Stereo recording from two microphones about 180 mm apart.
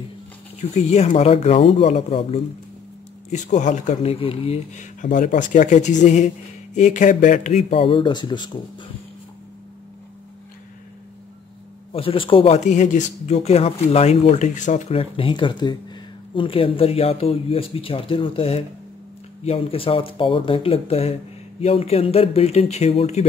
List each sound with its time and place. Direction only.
0.6 s speech: 35° left (ahead or behind)
5.0 s a man's voice: 45° left (ahead or behind); by 8.9 s 25° left (ahead or behind)
11.9 s speech: 30° left (ahead or behind)